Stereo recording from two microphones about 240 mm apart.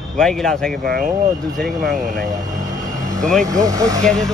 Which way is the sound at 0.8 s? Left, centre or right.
Right.